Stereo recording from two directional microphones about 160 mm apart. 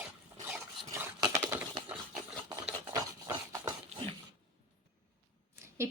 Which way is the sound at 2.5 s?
25° right (ahead or behind).